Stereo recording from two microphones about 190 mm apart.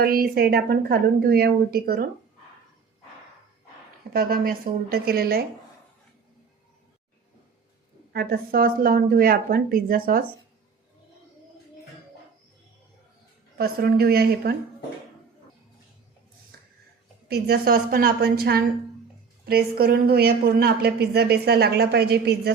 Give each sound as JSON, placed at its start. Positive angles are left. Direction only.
{"t": 0.0, "sound": "a woman's voice", "side_deg": -50}
{"t": 4.1, "sound": "a woman's voice", "side_deg": -50}
{"t": 8.1, "sound": "a woman's voice", "side_deg": -55}
{"t": 13.6, "sound": "a woman's voice", "side_deg": -55}
{"t": 17.2, "sound": "a woman's voice", "side_deg": -55}